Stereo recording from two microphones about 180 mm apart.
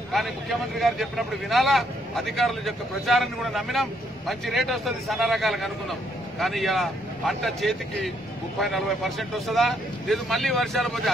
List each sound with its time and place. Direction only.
0.1 s speech: centre (ahead or behind)